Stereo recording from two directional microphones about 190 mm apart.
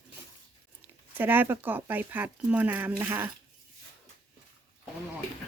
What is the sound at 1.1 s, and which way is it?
Speech, 10° right (ahead or behind).